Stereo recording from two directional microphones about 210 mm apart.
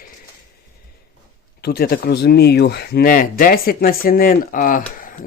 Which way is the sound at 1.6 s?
45° left (ahead or behind).